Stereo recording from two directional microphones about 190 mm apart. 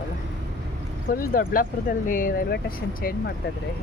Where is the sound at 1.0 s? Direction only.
50° left (ahead or behind).